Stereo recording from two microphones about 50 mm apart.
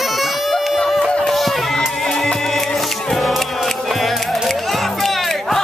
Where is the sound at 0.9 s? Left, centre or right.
Centre.